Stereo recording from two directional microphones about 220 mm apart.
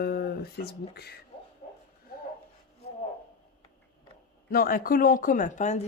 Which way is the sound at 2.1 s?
40° left (ahead or behind).